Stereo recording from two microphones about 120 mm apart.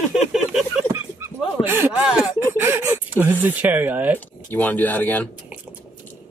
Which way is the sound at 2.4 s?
20° right (ahead or behind).